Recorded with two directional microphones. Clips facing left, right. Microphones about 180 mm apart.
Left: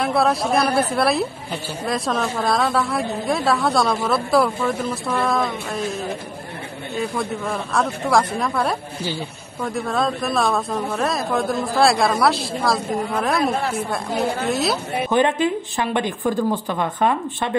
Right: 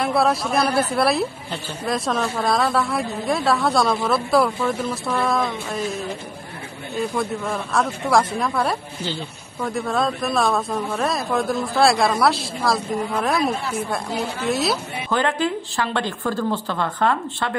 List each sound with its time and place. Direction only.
0.0 s a woman's voice: centre (ahead or behind)
13.5 s a woman's voice: 60° left (ahead or behind)
13.8 s a woman's voice: centre (ahead or behind)
15.0 s a woman's voice: 20° left (ahead or behind)